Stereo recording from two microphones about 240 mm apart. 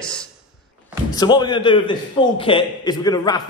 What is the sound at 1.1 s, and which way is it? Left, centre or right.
A man's voice, centre.